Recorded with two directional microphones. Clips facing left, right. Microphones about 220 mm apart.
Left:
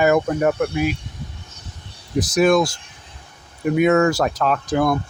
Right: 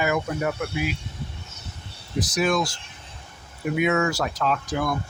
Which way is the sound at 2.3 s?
50° left (ahead or behind).